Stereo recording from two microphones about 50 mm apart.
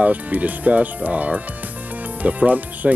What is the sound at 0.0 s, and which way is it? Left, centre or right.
Speech, right.